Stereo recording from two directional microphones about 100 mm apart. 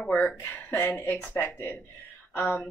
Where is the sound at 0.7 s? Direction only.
25° left (ahead or behind).